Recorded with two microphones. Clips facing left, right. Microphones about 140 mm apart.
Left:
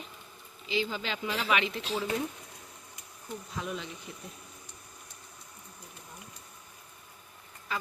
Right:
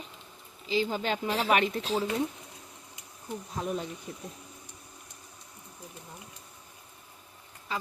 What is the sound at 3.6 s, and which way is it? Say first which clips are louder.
Speech: right 4 dB; 40° right (ahead or behind).